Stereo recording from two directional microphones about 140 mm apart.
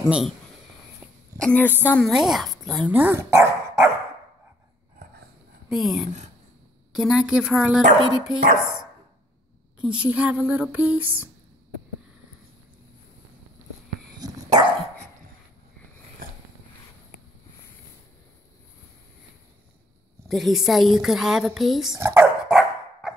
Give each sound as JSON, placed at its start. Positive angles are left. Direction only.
{"t": 0.0, "sound": "speech", "side_deg": -5}
{"t": 1.4, "sound": "a woman's voice", "side_deg": 10}
{"t": 2.0, "sound": "speech", "side_deg": 0}
{"t": 2.9, "sound": "speech", "side_deg": -15}
{"t": 5.7, "sound": "speech", "side_deg": 0}
{"t": 10.0, "sound": "a sound", "side_deg": -10}
{"t": 14.2, "sound": "dog", "side_deg": -25}
{"t": 16.2, "sound": "a sound", "side_deg": -90}
{"t": 20.2, "sound": "speech", "side_deg": 0}
{"t": 21.9, "sound": "a sound", "side_deg": -20}
{"t": 22.5, "sound": "dog", "side_deg": -5}